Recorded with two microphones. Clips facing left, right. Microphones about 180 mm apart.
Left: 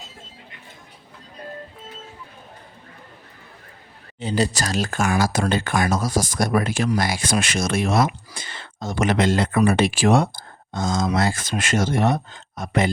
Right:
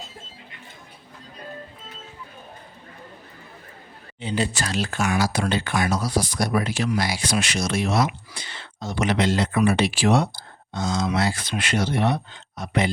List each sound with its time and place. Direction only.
4.2 s speech: 40° left (ahead or behind)